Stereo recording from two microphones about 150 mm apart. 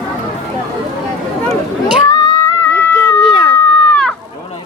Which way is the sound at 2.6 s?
15° left (ahead or behind).